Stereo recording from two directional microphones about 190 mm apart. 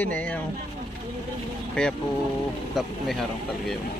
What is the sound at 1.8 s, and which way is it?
A man's voice, 5° left (ahead or behind).